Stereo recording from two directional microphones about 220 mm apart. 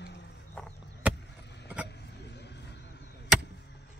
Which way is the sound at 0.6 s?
5° left (ahead or behind).